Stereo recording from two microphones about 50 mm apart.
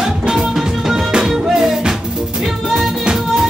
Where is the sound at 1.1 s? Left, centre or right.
Centre.